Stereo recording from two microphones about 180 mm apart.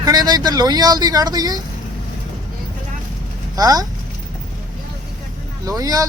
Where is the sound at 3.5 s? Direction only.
20° right (ahead or behind).